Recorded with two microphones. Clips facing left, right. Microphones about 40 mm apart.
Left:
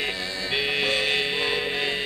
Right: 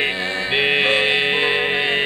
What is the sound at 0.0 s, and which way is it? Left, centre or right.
Music, right.